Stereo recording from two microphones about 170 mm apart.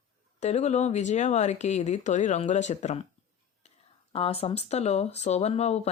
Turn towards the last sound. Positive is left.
turn(degrees=40)  # may be behind; listen again after turning